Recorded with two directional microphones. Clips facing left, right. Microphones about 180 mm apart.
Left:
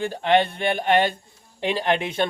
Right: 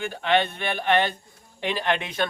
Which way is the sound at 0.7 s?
20° left (ahead or behind).